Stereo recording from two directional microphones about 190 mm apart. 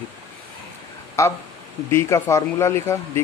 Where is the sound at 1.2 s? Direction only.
15° left (ahead or behind).